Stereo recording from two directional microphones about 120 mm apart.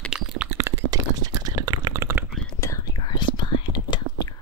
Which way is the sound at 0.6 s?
25° right (ahead or behind).